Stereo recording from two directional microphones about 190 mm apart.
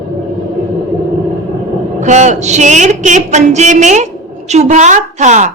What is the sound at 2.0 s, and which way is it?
A woman's voice, 40° right (ahead or behind).